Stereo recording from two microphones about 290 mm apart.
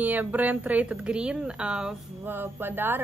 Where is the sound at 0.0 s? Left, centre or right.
Centre.